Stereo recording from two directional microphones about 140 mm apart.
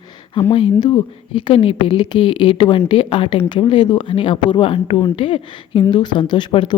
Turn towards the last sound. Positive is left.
turn(degrees=35)  # may be behind; listen again after turning